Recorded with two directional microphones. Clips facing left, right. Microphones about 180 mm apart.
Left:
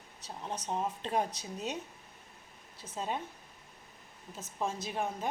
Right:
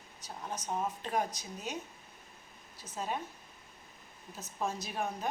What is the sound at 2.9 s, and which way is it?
Speech, 25° left (ahead or behind).